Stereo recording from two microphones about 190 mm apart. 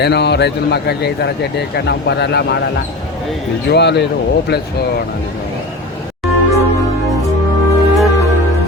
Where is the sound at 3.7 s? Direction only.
60° left (ahead or behind).